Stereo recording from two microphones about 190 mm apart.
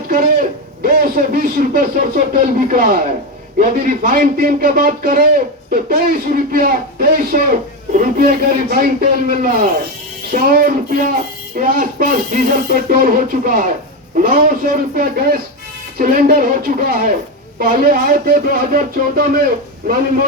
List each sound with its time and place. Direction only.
0.8 s speech: 50° right (ahead or behind)